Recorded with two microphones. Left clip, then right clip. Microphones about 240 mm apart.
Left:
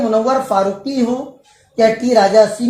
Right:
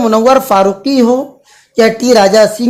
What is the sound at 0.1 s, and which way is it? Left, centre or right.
Speech, right.